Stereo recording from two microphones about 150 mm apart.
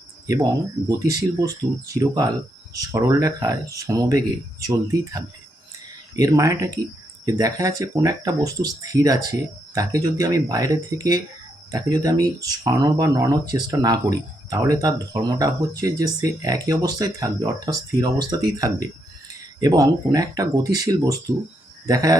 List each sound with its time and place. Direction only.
0.9 s speech: 25° right (ahead or behind)